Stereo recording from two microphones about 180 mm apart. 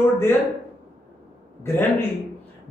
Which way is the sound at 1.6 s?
10° left (ahead or behind).